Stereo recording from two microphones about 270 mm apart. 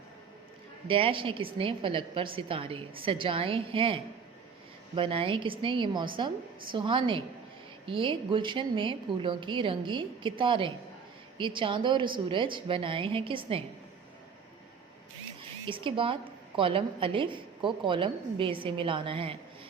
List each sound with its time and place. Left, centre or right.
0.9 s a woman's voice: centre
15.6 s a woman's voice: centre